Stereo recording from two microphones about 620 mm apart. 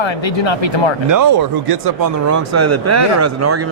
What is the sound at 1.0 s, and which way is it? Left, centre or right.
Speech, right.